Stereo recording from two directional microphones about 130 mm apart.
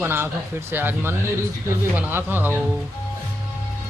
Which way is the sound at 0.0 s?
20° right (ahead or behind).